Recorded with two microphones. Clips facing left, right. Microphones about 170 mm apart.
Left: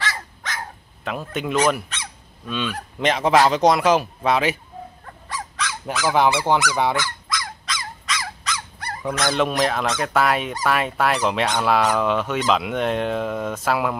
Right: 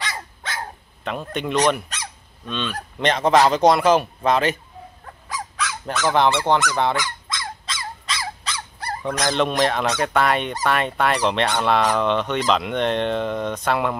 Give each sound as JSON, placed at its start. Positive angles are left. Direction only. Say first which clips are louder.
{"t": 0.0, "sound": "dog", "louder": "left 1 dB", "side_deg": -25}
{"t": 1.0, "sound": "speech", "louder": "even", "side_deg": 5}
{"t": 5.9, "sound": "speech", "louder": "even", "side_deg": 5}
{"t": 7.2, "sound": "squeak", "louder": "left 2 dB", "side_deg": -25}
{"t": 9.3, "sound": "speech", "louder": "right 1 dB", "side_deg": 5}